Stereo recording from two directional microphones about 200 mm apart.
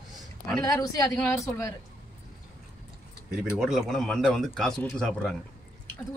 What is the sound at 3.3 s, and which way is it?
Speech, centre (ahead or behind).